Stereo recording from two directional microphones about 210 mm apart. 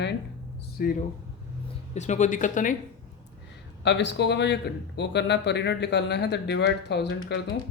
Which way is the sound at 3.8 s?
55° left (ahead or behind).